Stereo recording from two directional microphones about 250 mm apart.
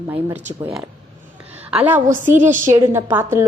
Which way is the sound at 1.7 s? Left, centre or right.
Centre.